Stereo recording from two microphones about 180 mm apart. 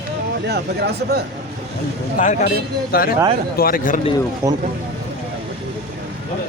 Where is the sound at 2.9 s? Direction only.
55° left (ahead or behind).